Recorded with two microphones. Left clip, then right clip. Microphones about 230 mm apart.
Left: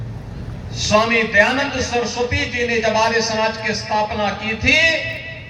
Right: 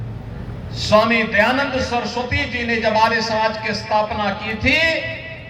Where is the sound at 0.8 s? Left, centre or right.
Right.